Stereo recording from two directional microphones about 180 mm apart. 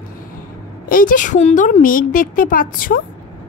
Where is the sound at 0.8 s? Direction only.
50° left (ahead or behind).